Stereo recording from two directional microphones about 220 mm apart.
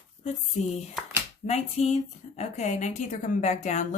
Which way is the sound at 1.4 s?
30° left (ahead or behind).